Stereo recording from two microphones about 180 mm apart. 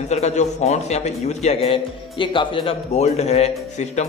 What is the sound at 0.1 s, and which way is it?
A man's voice, 40° left (ahead or behind).